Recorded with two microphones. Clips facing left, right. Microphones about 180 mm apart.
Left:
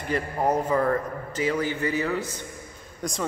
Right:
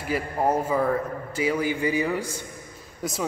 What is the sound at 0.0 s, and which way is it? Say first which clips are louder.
A man's voice: right 1 dB; 5° right (ahead or behind).